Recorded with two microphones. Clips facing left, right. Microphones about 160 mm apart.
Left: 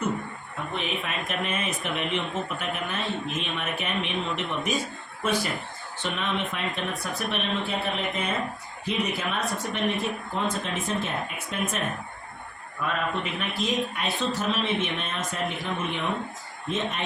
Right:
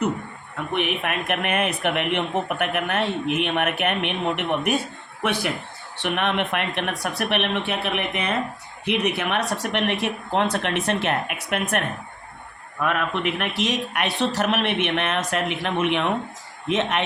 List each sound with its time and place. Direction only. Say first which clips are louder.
0.7 s speech: right 7 dB; 65° right (ahead or behind)
12.8 s speech: right 5 dB; 75° right (ahead or behind)